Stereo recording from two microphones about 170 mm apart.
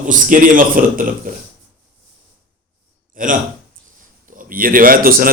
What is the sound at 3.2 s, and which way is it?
Speech, 55° right (ahead or behind).